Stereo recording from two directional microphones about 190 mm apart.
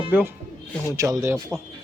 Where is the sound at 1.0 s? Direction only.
15° right (ahead or behind).